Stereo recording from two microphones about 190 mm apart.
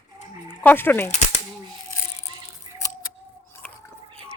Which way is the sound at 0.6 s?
10° left (ahead or behind).